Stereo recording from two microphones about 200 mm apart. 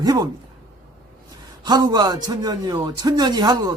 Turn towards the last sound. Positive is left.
turn(degrees=-20)  # may be behind; listen again after turning